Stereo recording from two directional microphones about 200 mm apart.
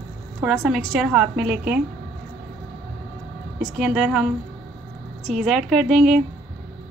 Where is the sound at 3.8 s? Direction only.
Centre (ahead or behind).